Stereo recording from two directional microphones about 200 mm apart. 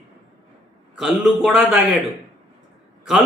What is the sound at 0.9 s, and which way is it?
Speech, 5° right (ahead or behind).